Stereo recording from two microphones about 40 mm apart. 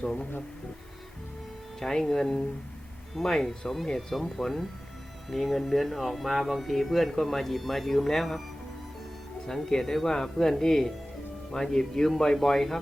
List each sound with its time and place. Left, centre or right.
0.0 s speech: left
1.8 s speech: centre
9.5 s speech: centre